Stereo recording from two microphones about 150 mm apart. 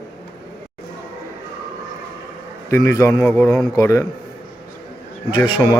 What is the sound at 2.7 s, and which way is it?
A man's voice, 20° left (ahead or behind).